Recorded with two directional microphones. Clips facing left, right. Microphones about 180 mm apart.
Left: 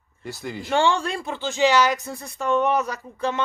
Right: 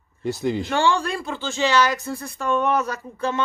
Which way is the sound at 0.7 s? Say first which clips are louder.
Left 4 dB; 20° left (ahead or behind).